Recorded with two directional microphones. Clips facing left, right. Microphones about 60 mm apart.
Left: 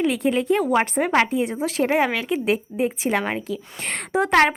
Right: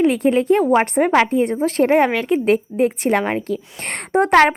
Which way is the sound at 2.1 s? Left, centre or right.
Right.